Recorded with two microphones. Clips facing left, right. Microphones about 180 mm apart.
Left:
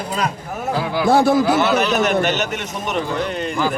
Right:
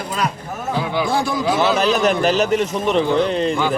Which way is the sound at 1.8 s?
35° right (ahead or behind).